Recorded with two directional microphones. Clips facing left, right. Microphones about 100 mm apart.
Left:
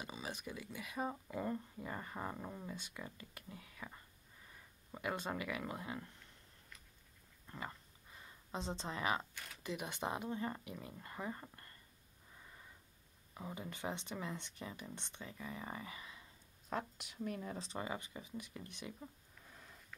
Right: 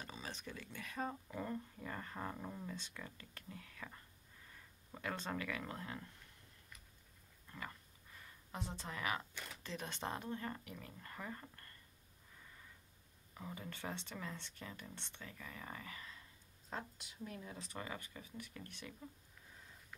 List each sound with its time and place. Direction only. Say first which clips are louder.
0.0 s speech: left 3 dB; 15° left (ahead or behind)
7.5 s a sound: left 3 dB; 20° left (ahead or behind)
9.6 s speech: left 4 dB; 15° left (ahead or behind)
13.4 s speech: left 3 dB; 15° left (ahead or behind)
16.6 s speech: left 5 dB; 65° left (ahead or behind)
17.6 s speech: left 4 dB; 25° left (ahead or behind)